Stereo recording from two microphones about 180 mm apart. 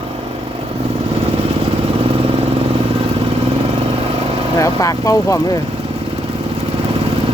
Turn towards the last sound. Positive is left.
turn(degrees=20)  # may be behind; listen again after turning